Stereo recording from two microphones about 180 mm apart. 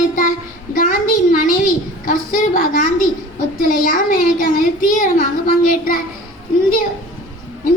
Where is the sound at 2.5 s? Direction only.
50° left (ahead or behind).